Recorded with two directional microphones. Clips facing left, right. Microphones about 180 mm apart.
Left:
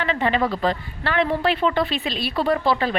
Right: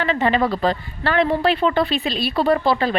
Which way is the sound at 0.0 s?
40° right (ahead or behind).